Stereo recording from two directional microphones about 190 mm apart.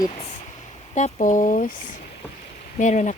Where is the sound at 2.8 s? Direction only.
40° left (ahead or behind).